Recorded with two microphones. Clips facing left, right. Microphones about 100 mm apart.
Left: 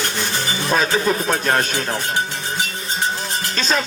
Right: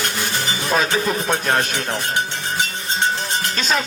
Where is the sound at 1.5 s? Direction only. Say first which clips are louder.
Left 1 dB; 40° left (ahead or behind).